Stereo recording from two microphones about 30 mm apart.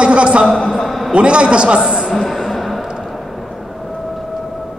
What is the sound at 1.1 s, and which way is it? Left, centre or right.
Speech, right.